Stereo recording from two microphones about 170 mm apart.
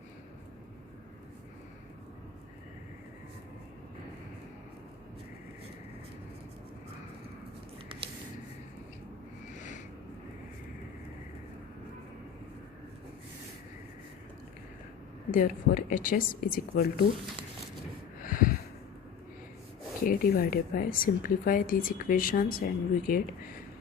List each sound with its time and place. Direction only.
15.3 s a woman's voice: 50° left (ahead or behind)
18.2 s a sound: 55° left (ahead or behind)
20.1 s a woman's voice: 55° left (ahead or behind)